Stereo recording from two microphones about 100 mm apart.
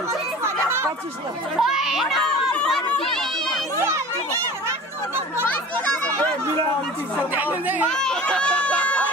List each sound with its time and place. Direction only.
1.6 s speech: 5° right (ahead or behind)
7.3 s speech: 15° right (ahead or behind)
7.9 s speech: 5° left (ahead or behind)